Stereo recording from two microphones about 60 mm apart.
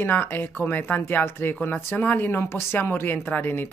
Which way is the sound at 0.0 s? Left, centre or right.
Left.